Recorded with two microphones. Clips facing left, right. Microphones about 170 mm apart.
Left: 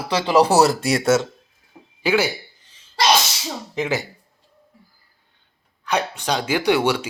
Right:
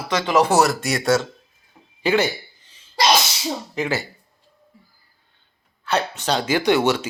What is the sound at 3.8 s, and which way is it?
Speech, 15° left (ahead or behind).